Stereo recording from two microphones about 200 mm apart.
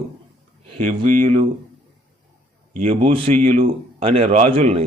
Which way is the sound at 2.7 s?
30° right (ahead or behind).